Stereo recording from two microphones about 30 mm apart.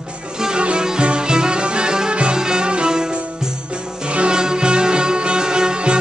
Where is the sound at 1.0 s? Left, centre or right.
Right.